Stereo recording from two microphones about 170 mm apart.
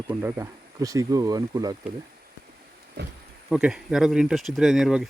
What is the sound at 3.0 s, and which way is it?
Speech, 75° right (ahead or behind).